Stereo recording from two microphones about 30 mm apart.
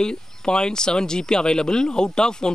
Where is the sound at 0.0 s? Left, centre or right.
Left.